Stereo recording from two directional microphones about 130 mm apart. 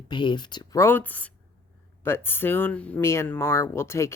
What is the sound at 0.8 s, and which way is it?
Speech, 15° left (ahead or behind).